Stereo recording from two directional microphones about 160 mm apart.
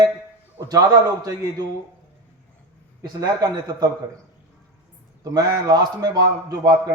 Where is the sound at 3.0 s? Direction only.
25° right (ahead or behind).